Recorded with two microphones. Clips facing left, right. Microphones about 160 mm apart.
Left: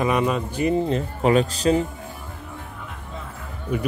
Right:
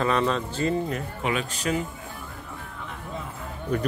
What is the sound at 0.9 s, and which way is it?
Speech, 30° left (ahead or behind).